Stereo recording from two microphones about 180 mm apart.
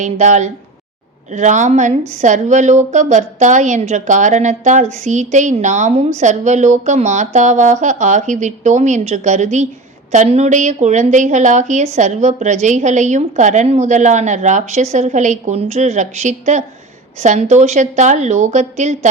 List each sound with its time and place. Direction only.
0.0 s a woman's voice: 40° right (ahead or behind)